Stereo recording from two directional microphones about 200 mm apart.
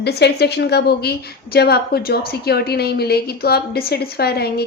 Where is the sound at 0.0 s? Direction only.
55° left (ahead or behind).